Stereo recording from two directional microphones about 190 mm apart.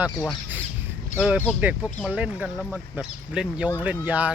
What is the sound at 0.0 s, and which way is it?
Speech, 5° right (ahead or behind).